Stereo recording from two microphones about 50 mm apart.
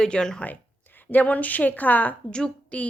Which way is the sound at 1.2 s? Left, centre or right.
Left.